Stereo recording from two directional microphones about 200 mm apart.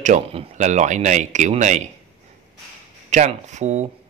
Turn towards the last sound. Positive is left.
turn(degrees=-35)  # may be behind; listen again after turning